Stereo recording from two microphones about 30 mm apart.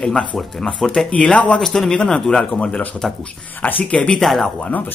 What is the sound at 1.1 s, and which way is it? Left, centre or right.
Speech, left.